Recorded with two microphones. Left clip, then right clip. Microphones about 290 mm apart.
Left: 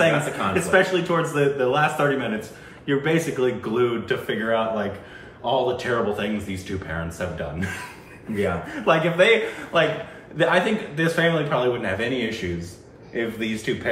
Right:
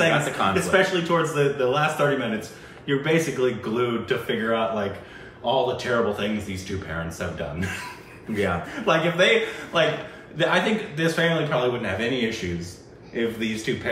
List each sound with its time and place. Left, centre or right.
0.0 s speech: centre